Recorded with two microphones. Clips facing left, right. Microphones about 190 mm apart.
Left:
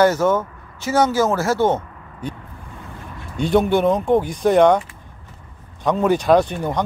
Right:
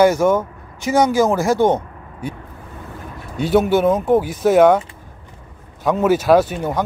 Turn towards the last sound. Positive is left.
turn(degrees=-5)  # may be behind; listen again after turning